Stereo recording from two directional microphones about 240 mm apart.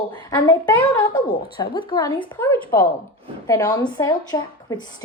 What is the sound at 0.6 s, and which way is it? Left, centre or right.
Speech, centre.